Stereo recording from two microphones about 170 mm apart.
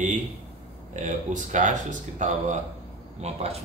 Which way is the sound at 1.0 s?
45° right (ahead or behind).